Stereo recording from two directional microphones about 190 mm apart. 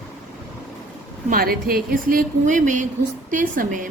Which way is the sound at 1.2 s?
50° right (ahead or behind).